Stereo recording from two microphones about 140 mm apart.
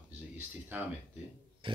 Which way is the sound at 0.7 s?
15° right (ahead or behind).